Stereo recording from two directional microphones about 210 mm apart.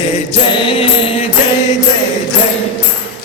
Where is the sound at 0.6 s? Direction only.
25° left (ahead or behind).